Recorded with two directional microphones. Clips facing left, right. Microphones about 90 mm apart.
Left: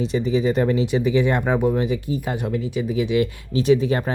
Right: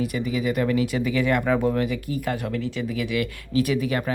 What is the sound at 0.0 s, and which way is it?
Speech, 25° left (ahead or behind).